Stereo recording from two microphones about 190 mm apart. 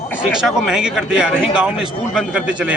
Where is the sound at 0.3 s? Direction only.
5° right (ahead or behind).